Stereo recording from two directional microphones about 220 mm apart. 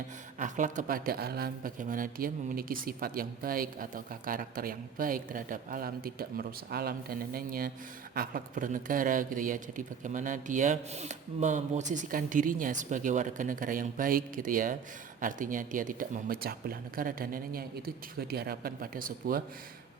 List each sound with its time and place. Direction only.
0.3 s speech: 35° right (ahead or behind)